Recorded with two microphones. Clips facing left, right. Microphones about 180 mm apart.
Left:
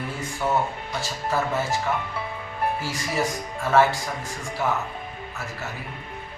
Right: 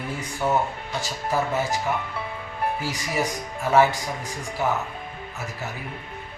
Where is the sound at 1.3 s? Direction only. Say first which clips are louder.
Right 1 dB; 15° right (ahead or behind).